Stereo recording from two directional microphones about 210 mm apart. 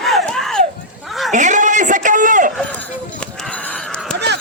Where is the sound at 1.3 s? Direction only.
35° right (ahead or behind).